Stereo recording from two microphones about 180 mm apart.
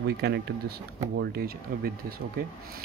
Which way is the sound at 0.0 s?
65° right (ahead or behind).